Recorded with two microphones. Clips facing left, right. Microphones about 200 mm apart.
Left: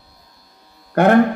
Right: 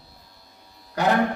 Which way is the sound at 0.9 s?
60° left (ahead or behind).